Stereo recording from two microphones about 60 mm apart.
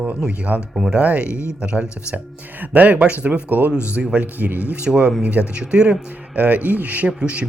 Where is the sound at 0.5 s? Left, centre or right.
Right.